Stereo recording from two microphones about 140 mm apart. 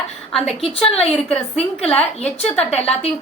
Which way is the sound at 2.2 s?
50° left (ahead or behind).